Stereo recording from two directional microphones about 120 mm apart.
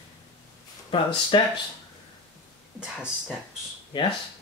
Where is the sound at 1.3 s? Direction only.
40° left (ahead or behind).